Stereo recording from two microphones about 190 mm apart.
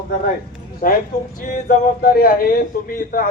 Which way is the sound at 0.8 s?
50° left (ahead or behind).